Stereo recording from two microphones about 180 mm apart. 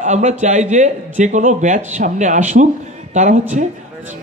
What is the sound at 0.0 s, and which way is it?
Speech, 40° right (ahead or behind).